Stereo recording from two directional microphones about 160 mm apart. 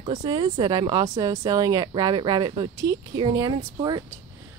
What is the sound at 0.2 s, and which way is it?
Speech, 30° right (ahead or behind).